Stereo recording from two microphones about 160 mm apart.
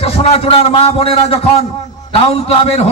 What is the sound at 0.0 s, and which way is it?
A man's voice, 35° left (ahead or behind).